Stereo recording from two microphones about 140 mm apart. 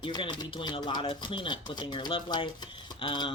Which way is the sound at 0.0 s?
35° left (ahead or behind).